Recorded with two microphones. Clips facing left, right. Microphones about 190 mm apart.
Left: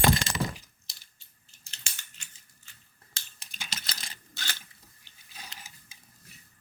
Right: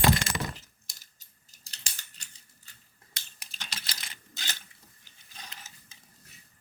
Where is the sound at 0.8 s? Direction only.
40° right (ahead or behind).